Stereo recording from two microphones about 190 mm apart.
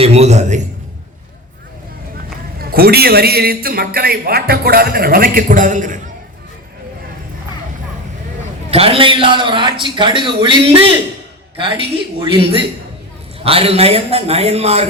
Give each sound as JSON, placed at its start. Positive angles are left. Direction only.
{"t": 0.0, "sound": "a sound", "side_deg": -35}
{"t": 2.6, "sound": "a man's voice", "side_deg": -50}
{"t": 8.7, "sound": "a man's voice", "side_deg": -30}